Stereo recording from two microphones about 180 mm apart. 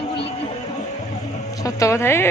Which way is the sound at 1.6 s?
15° left (ahead or behind).